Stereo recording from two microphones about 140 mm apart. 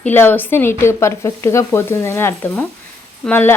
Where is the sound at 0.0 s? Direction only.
15° left (ahead or behind).